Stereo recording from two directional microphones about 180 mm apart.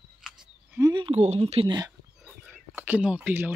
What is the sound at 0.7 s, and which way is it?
Speech, 25° right (ahead or behind).